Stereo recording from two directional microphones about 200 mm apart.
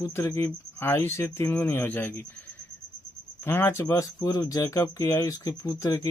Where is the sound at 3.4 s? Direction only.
10° left (ahead or behind).